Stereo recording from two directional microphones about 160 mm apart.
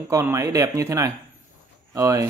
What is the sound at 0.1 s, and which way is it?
Speech, 20° right (ahead or behind).